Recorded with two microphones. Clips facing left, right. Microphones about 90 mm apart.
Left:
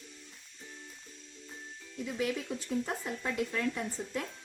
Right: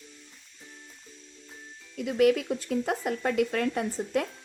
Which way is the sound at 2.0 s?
75° right (ahead or behind).